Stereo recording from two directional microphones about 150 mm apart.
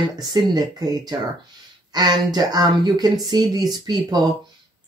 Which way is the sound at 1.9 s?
25° right (ahead or behind).